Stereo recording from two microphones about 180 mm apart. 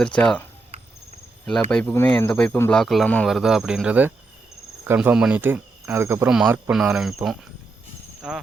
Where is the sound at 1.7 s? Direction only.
5° left (ahead or behind).